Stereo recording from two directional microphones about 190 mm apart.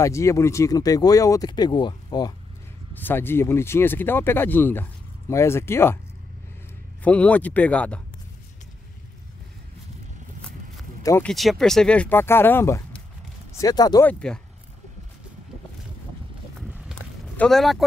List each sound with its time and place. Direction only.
0.0 s speech: 15° left (ahead or behind)
2.9 s speech: 10° left (ahead or behind)
7.0 s speech: 5° left (ahead or behind)
11.0 s a sound: 15° left (ahead or behind)
11.2 s speech: centre (ahead or behind); by 14.0 s 20° left (ahead or behind)
14.0 s speech: 5° left (ahead or behind)
16.5 s a sound: 5° right (ahead or behind)
17.4 s speech: centre (ahead or behind)